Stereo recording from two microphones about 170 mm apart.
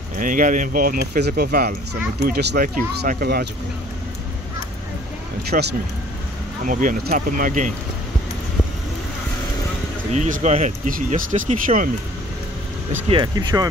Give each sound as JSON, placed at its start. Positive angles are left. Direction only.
{"t": 0.2, "sound": "speech", "side_deg": -50}
{"t": 5.5, "sound": "speech", "side_deg": -75}
{"t": 6.6, "sound": "speech", "side_deg": -50}
{"t": 10.1, "sound": "speech", "side_deg": -45}
{"t": 13.1, "sound": "speech", "side_deg": -25}